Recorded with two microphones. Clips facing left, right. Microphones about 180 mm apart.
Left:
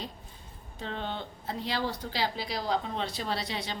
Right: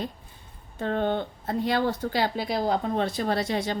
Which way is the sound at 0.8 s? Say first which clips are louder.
Right 10 dB; 50° right (ahead or behind).